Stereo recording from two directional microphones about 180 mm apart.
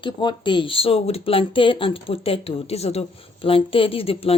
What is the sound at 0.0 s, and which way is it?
A woman's voice, 25° left (ahead or behind).